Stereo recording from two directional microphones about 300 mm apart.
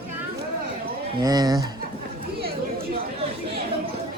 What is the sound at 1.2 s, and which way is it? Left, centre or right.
Speech, centre.